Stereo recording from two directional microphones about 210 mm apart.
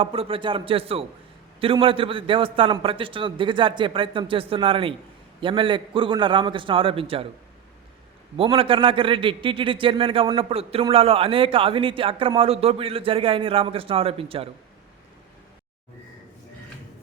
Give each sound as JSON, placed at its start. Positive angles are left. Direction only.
{"t": 0.0, "sound": "a man's voice", "side_deg": -25}
{"t": 8.4, "sound": "a man's voice", "side_deg": -25}